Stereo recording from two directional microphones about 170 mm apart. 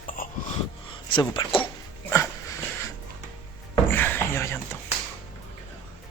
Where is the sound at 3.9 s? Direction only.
10° left (ahead or behind).